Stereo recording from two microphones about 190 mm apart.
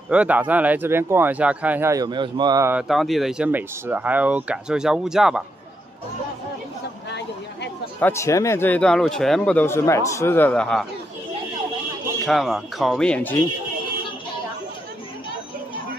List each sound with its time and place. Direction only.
0.1 s speech: 5° right (ahead or behind)
2.9 s speech: centre (ahead or behind)
7.1 s a sound: 65° left (ahead or behind)
8.0 s speech: 15° left (ahead or behind)
12.3 s speech: centre (ahead or behind)